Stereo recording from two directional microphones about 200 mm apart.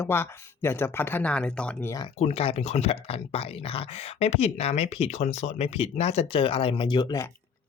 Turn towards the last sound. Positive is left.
turn(degrees=20)  # may be behind; listen again after turning